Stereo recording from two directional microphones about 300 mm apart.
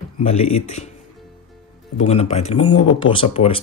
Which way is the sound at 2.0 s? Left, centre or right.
Left.